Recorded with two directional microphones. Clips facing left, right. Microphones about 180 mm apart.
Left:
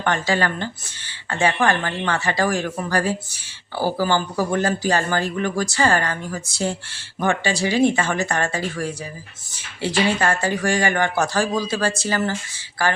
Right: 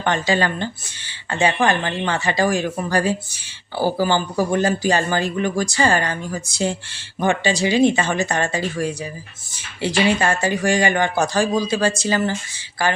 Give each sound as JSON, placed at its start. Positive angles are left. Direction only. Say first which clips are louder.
{"t": 0.0, "sound": "speech", "louder": "right 2 dB", "side_deg": -20}